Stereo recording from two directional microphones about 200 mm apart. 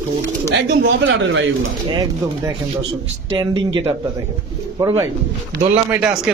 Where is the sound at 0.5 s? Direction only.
65° right (ahead or behind).